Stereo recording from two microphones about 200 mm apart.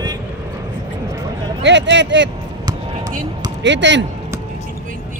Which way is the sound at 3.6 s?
65° right (ahead or behind).